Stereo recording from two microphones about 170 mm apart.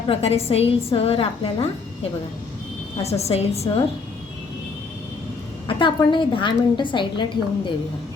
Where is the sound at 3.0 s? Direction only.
40° left (ahead or behind).